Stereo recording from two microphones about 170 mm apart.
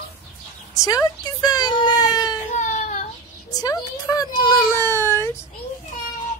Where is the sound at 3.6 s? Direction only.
20° left (ahead or behind).